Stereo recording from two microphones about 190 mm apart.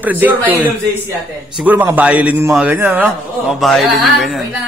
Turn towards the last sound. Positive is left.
turn(degrees=0)  # may be behind; listen again after turning